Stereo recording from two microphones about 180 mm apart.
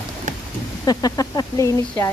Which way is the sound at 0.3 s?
40° right (ahead or behind).